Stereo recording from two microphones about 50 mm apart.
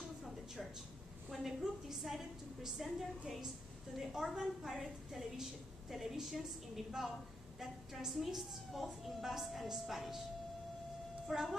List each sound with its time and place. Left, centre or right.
1.3 s a woman's voice: centre